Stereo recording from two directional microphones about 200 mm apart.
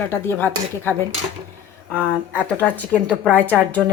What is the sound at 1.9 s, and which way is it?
Speech, 10° right (ahead or behind).